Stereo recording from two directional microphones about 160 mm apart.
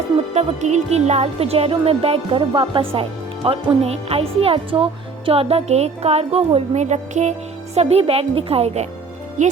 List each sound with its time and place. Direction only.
0.3 s a woman's voice: 45° right (ahead or behind)